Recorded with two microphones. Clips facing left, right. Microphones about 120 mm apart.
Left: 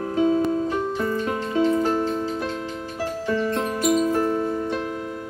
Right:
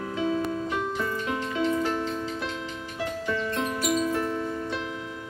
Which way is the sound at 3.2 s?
35° left (ahead or behind).